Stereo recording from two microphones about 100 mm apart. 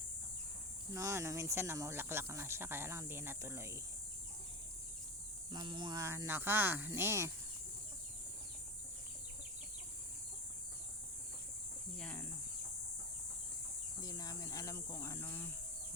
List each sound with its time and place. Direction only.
0.9 s speech: 30° right (ahead or behind)
5.5 s speech: 45° right (ahead or behind)
6.0 s speech: 30° right (ahead or behind)
11.9 s speech: 10° left (ahead or behind)
14.0 s speech: 40° left (ahead or behind); by 15.4 s 25° left (ahead or behind)